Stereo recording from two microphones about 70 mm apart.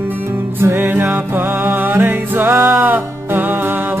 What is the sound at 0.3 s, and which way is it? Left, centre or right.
Music, right.